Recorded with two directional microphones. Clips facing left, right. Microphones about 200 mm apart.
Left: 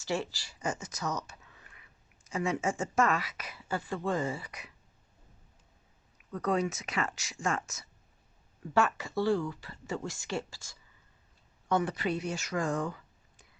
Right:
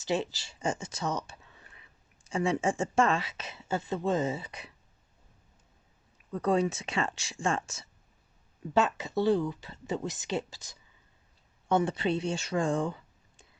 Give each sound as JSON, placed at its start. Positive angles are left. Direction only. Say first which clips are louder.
{"t": 0.0, "sound": "speech", "louder": "right 3 dB", "side_deg": -20}
{"t": 6.3, "sound": "speech", "louder": "right 3 dB", "side_deg": -30}